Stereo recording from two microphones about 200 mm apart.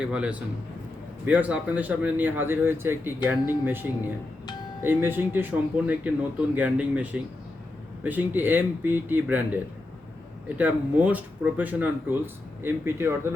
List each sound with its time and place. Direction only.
0.0 s a man's voice: 5° right (ahead or behind)
10.6 s speech: 10° right (ahead or behind)